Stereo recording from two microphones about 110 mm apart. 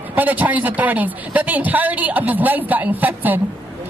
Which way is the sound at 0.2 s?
15° right (ahead or behind).